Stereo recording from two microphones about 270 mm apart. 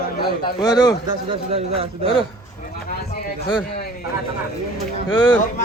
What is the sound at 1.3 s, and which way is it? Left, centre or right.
Speech, right.